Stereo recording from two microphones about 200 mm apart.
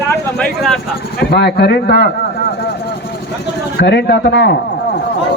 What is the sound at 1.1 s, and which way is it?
Speech, 55° left (ahead or behind).